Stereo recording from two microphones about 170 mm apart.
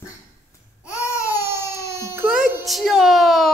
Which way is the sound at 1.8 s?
15° right (ahead or behind).